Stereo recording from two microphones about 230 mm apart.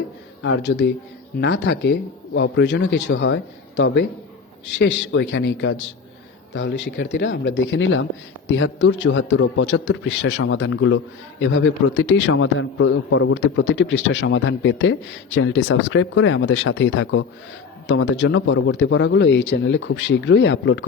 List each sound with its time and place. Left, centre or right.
0.4 s a man's voice: left